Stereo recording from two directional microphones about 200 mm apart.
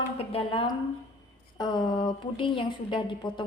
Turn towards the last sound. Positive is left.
turn(degrees=25)  # may be behind; listen again after turning